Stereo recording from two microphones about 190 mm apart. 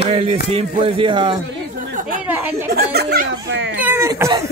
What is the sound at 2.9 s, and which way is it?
Speech, 55° right (ahead or behind).